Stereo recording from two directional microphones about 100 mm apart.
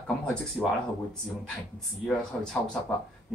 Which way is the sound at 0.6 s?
5° left (ahead or behind).